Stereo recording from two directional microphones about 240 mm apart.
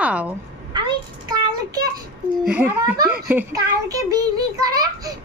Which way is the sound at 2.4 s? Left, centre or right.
Centre.